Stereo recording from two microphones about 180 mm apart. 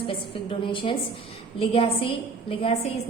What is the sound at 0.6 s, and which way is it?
A woman's voice, 30° left (ahead or behind).